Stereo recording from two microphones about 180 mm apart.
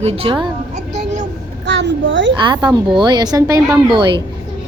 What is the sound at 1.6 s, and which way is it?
Speech, 80° right.